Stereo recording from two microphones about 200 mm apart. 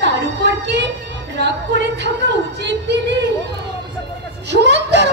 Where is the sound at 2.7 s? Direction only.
60° right (ahead or behind).